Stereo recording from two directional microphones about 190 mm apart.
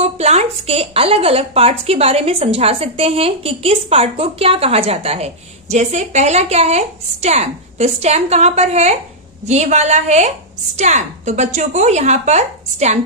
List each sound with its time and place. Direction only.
0.0 s a woman's voice: 35° right (ahead or behind)